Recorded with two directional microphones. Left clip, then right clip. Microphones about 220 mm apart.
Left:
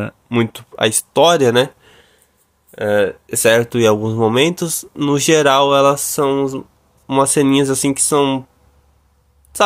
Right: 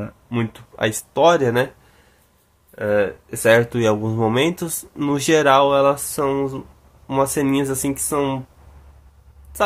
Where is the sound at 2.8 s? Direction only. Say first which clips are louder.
Left 4 dB; 35° left (ahead or behind).